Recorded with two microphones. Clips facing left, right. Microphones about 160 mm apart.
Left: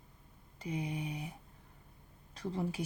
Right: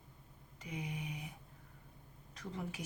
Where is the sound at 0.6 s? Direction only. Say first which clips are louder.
Left 6 dB; 35° left (ahead or behind).